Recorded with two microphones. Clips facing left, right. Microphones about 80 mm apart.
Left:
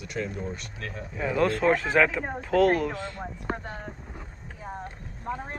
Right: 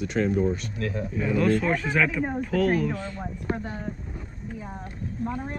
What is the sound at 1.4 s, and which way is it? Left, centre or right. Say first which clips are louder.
Speech: left 1 dB; left.